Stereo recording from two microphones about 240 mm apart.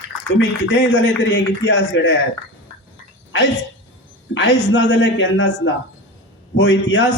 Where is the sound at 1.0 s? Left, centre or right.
Left.